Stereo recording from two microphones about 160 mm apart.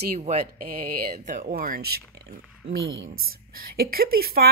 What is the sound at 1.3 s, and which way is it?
Speech, 55° right (ahead or behind).